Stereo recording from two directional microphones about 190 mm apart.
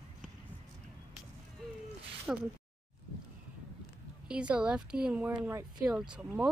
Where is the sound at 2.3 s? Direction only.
5° right (ahead or behind).